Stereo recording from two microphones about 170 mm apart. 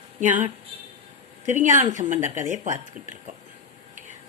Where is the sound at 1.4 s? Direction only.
50° right (ahead or behind).